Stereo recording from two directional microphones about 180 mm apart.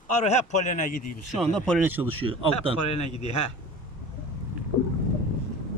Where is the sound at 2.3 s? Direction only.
30° right (ahead or behind).